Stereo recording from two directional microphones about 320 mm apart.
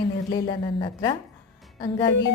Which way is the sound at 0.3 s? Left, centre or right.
Centre.